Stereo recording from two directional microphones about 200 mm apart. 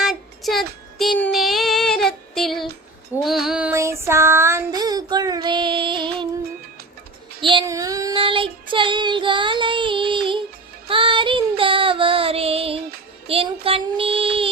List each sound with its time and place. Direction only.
0.0 s child singing: centre (ahead or behind); by 6.2 s 25° right (ahead or behind)
7.4 s child singing: 20° right (ahead or behind)
13.2 s music: 30° right (ahead or behind)